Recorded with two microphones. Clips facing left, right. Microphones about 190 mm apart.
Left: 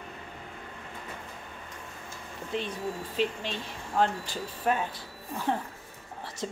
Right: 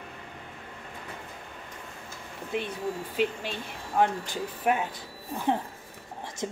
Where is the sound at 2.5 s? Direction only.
10° right (ahead or behind).